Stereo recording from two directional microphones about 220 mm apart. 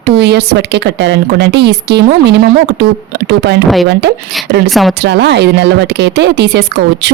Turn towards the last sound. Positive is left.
turn(degrees=-50)  # may be behind; listen again after turning